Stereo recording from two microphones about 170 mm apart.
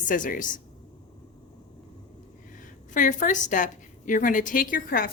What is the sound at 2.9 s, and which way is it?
A woman's voice, 50° left (ahead or behind).